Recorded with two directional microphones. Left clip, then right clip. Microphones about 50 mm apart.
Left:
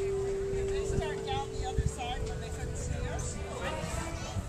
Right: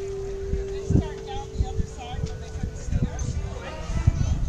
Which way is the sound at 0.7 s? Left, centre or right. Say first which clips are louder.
Right 3 dB; left.